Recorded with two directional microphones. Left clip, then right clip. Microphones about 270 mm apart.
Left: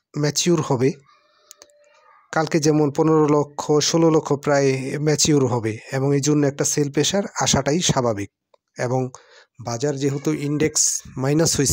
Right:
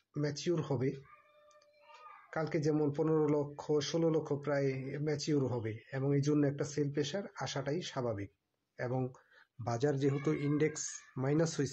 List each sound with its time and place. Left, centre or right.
0.1 s speech: left
2.2 s speech: left